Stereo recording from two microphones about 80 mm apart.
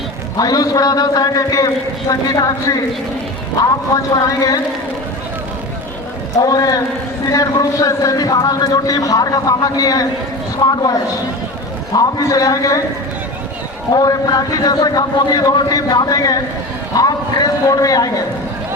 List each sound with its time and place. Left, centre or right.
0.3 s a man's voice: left
6.4 s a man's voice: left
10.6 s a woman's voice: left
11.9 s a man's voice: left
13.9 s a man's voice: left
15.5 s a man's voice: left